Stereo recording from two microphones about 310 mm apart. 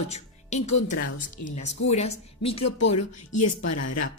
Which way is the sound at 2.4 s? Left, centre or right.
Left.